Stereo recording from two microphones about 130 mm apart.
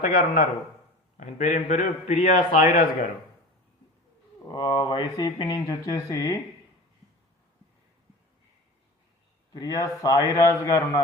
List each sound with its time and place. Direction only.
0.0 s a man's voice: 80° left
4.5 s speech: 35° left (ahead or behind)
9.5 s speech: 30° left (ahead or behind)